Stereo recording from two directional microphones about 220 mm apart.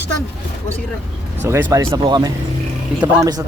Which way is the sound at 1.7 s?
15° right (ahead or behind).